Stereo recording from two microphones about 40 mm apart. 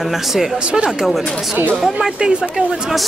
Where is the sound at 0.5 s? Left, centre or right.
Right.